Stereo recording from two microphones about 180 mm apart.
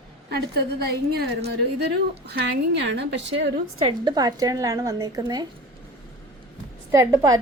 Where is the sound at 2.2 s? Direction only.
75° right (ahead or behind).